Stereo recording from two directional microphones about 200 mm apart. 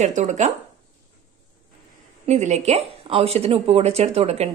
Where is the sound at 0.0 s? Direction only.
35° right (ahead or behind).